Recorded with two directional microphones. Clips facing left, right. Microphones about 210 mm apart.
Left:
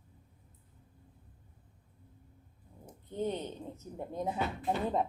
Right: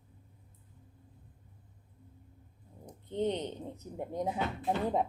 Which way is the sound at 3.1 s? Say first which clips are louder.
Right 3 dB; 20° right (ahead or behind).